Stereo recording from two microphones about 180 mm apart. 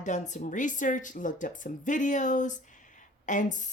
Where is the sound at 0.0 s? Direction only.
45° left (ahead or behind).